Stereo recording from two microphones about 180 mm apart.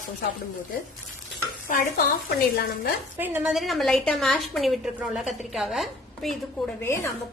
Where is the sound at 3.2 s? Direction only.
10° right (ahead or behind).